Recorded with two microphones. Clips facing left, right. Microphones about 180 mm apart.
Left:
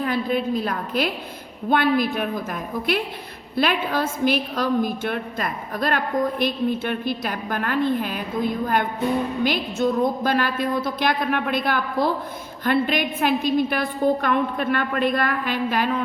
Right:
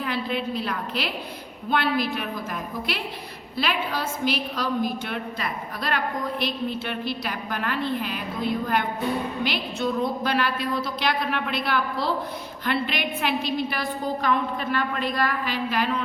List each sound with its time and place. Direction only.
0.0 s a woman's voice: 45° left (ahead or behind)